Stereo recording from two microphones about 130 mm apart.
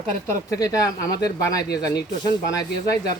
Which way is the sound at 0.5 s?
25° left (ahead or behind).